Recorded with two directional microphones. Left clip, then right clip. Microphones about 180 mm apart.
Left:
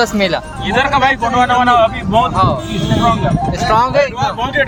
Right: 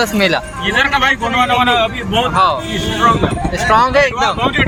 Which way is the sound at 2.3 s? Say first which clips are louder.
Right 2 dB; centre (ahead or behind).